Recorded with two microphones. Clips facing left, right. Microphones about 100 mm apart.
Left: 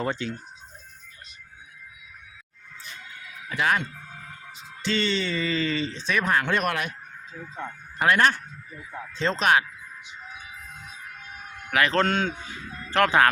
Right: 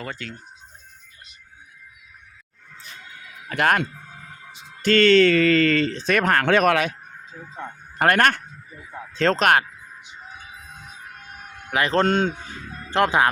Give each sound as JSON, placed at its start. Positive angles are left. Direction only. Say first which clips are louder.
{"t": 0.0, "sound": "speech", "louder": "left 5 dB", "side_deg": 25}
{"t": 3.5, "sound": "speech", "louder": "right 4 dB", "side_deg": -60}
{"t": 7.9, "sound": "speech", "louder": "right 3 dB", "side_deg": -55}
{"t": 9.4, "sound": "speech", "louder": "right 1 dB", "side_deg": -55}
{"t": 11.7, "sound": "speech", "louder": "right 3 dB", "side_deg": -25}
{"t": 12.9, "sound": "speech", "louder": "right 1 dB", "side_deg": -20}